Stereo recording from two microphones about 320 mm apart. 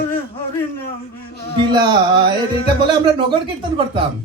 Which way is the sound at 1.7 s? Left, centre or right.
Centre.